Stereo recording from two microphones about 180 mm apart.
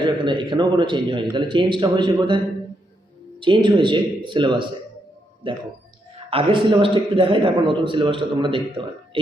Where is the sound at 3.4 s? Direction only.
25° right (ahead or behind).